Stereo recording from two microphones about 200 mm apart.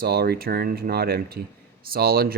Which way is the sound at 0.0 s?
50° right (ahead or behind).